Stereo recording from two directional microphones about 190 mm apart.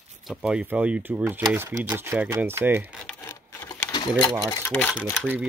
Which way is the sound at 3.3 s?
20° left (ahead or behind).